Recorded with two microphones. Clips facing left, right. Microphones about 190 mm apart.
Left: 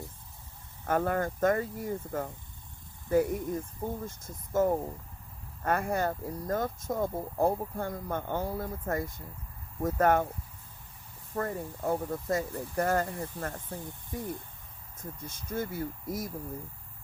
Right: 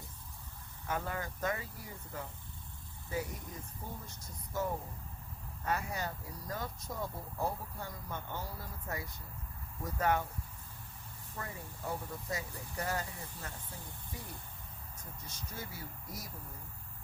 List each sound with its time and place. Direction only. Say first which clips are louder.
0.9 s speech: left 10 dB; 55° left (ahead or behind)
11.3 s speech: left 12 dB; 50° left (ahead or behind)